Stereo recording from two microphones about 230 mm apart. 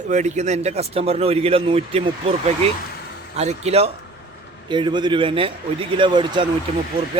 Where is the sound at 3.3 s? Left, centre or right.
Right.